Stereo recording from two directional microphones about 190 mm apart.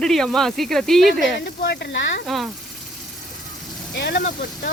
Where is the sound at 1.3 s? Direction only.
60° left (ahead or behind).